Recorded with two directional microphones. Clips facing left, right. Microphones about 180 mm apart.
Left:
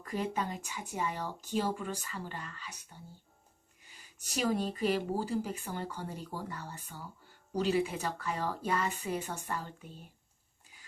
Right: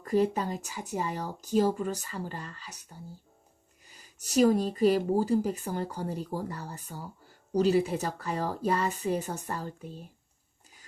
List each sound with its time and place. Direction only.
0.0 s speech: 35° right (ahead or behind)
3.8 s speech: 40° right (ahead or behind)